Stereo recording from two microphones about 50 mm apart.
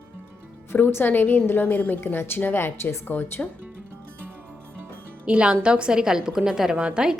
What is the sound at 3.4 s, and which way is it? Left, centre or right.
Speech, left.